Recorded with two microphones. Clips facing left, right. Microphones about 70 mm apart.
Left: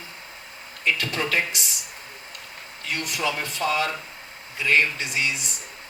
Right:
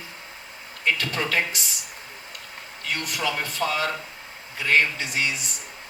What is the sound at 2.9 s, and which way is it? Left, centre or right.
Speech, right.